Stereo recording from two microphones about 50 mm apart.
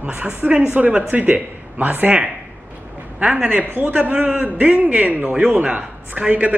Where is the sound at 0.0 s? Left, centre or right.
Right.